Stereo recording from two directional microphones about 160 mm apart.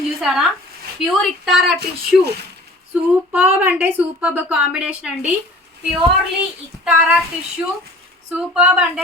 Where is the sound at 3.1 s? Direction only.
10° right (ahead or behind).